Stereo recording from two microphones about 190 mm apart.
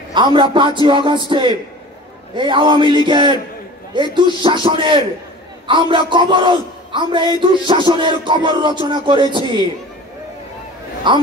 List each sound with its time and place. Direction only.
0.1 s a man's voice: 25° right (ahead or behind)
11.1 s a man's voice: 25° right (ahead or behind)